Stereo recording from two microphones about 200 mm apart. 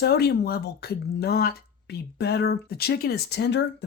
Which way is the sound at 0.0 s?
55° left (ahead or behind).